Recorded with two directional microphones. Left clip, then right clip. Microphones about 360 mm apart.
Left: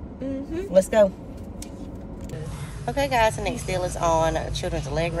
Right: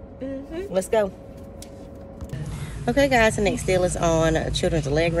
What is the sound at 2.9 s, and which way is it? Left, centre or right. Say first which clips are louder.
A woman's voice: right 3 dB; right.